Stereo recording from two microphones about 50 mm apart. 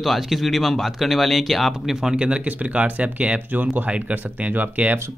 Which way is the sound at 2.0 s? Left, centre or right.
Right.